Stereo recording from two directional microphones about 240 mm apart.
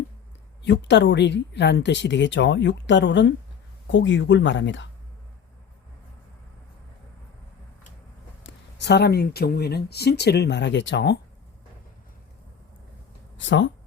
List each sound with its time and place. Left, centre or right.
0.6 s speech: left
8.4 s speech: left
13.3 s speech: left